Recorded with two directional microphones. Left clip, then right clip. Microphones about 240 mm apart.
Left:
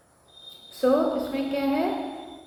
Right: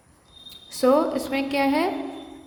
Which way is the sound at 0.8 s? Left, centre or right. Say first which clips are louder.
Right 2 dB; right.